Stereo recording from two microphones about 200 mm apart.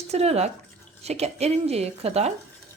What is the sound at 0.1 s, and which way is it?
Speech, 30° right (ahead or behind).